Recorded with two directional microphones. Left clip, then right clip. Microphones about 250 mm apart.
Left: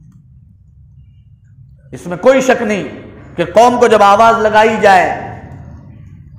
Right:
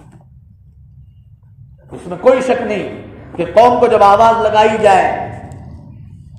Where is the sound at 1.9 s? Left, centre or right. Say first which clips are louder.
Left 1 dB; left.